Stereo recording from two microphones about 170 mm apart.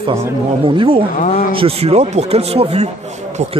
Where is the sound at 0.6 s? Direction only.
30° right (ahead or behind).